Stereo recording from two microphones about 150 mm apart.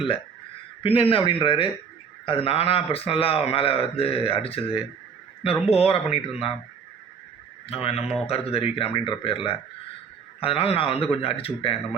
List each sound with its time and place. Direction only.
0.8 s a man's voice: 40° left (ahead or behind)
7.7 s a man's voice: 40° left (ahead or behind)